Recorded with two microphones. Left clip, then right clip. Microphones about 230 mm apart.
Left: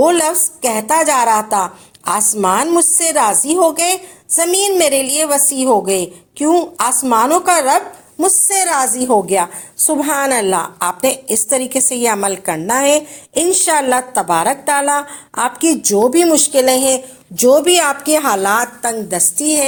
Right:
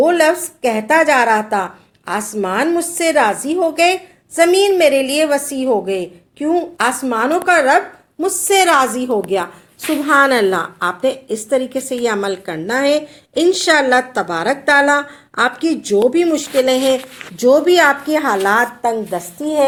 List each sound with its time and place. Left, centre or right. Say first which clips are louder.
0.0 s a woman's voice: even; left